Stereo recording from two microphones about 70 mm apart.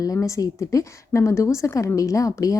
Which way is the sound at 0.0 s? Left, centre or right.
Left.